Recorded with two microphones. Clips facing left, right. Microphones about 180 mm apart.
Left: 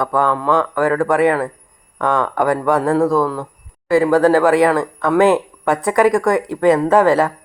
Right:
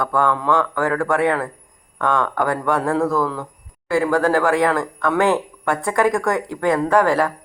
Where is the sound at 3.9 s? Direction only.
20° left (ahead or behind).